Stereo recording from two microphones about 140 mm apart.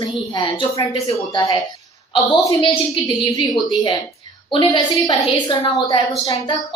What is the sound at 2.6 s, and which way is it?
A woman's voice, 40° left (ahead or behind).